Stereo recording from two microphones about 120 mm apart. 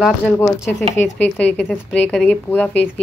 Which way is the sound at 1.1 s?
15° left (ahead or behind).